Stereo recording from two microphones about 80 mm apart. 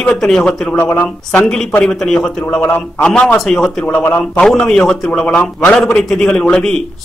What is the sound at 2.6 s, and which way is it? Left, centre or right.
A man's voice, left.